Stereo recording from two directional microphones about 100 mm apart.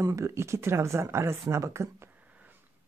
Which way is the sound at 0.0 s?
30° right (ahead or behind).